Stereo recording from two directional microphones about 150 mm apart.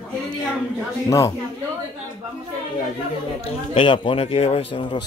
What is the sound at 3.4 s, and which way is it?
A man's voice, 40° left (ahead or behind).